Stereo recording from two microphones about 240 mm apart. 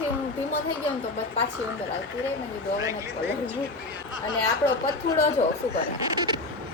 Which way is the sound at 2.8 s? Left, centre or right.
Centre.